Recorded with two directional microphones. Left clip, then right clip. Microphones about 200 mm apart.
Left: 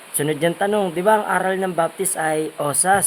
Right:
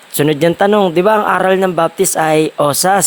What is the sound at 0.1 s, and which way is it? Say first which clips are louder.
Speech: right 8 dB; 40° right (ahead or behind).